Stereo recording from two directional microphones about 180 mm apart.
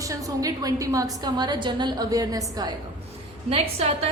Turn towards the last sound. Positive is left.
turn(degrees=-35)  # may be behind; listen again after turning